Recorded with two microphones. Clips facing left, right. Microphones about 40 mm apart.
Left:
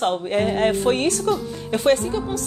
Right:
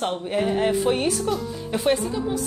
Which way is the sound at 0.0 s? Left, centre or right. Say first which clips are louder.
Left 4 dB; left.